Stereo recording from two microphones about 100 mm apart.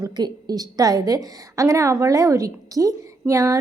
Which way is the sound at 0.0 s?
40° right (ahead or behind).